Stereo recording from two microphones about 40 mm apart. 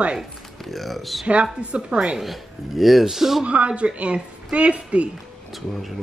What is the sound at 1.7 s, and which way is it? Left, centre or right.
Speech, right.